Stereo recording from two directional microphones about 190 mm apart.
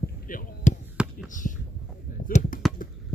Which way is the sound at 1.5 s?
45° left (ahead or behind).